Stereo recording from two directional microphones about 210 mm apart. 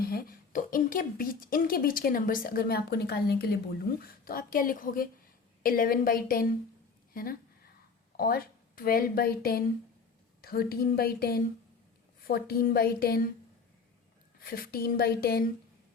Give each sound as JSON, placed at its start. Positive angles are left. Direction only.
{"t": 0.0, "sound": "a woman's voice", "side_deg": 45}
{"t": 14.3, "sound": "a woman's voice", "side_deg": 45}